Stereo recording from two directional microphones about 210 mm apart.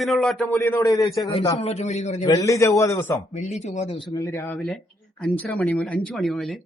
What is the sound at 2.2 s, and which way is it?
Speech, 15° left (ahead or behind).